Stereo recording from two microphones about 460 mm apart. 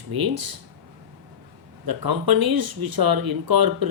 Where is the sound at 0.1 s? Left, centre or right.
Right.